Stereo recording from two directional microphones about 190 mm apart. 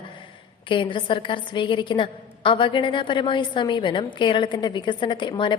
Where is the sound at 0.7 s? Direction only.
25° left (ahead or behind).